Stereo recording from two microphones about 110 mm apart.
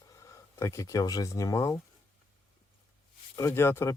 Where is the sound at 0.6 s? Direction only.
25° left (ahead or behind).